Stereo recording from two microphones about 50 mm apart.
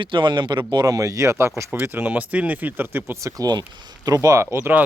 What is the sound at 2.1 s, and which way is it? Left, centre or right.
Speech, right.